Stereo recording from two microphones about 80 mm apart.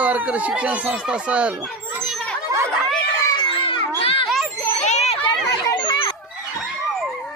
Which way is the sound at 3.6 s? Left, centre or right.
Left.